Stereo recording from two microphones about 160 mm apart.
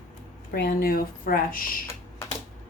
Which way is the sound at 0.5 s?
70° left (ahead or behind).